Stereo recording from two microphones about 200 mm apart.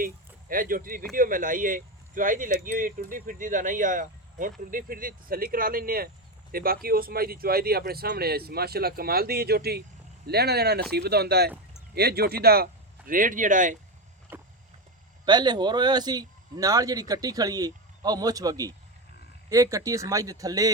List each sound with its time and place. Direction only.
0.0 s speech: 45° right (ahead or behind)
15.2 s speech: 20° right (ahead or behind)